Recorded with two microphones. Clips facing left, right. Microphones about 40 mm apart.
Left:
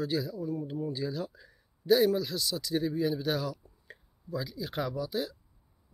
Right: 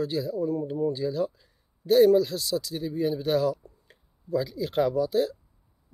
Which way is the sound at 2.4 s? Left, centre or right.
Centre.